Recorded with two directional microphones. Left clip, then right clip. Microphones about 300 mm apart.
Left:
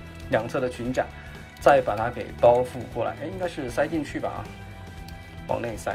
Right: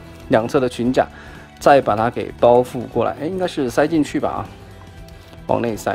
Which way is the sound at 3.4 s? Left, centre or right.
Centre.